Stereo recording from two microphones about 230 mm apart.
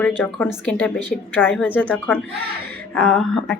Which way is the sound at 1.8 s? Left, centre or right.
Centre.